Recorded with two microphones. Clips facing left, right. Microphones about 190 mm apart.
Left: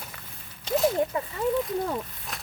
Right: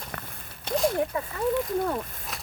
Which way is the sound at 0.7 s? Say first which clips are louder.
Left 2 dB; 55° right (ahead or behind).